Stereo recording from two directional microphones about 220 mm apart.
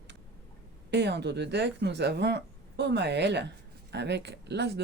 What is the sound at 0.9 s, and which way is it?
Speech, 50° right (ahead or behind).